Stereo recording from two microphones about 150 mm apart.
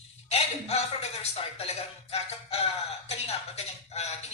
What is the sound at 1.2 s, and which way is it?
Speech, 40° left (ahead or behind).